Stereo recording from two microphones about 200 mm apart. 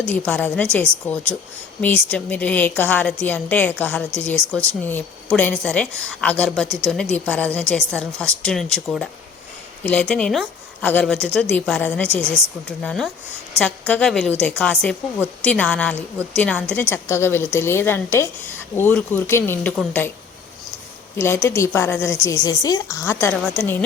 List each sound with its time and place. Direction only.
0.1 s a woman's voice: 5° left (ahead or behind)
21.2 s a woman's voice: 10° left (ahead or behind)